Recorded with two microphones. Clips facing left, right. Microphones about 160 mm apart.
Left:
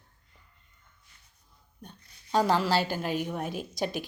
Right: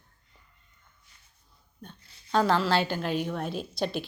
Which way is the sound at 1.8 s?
15° left (ahead or behind).